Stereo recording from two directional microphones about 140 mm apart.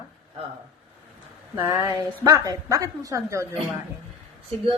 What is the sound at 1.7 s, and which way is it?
A woman's voice, 25° right (ahead or behind).